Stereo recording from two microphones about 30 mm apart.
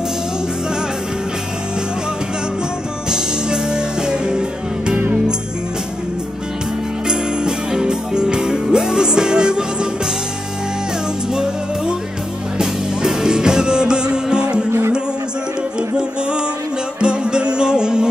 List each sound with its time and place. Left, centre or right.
3.1 s music: right
7.1 s music: right
11.3 s music: right
16.0 s music: right